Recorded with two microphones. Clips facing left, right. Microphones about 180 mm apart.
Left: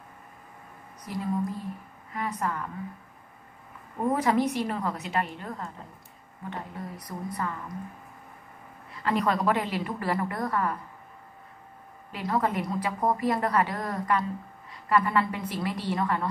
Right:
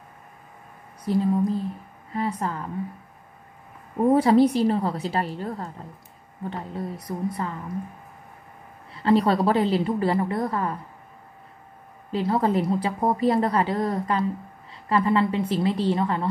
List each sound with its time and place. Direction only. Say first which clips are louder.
1.0 s a woman's voice: right 8 dB; 30° right (ahead or behind)
4.0 s a woman's voice: right 7 dB; 30° right (ahead or behind)
8.9 s a woman's voice: right 6 dB; 30° right (ahead or behind)
12.1 s a woman's voice: right 5 dB; 30° right (ahead or behind)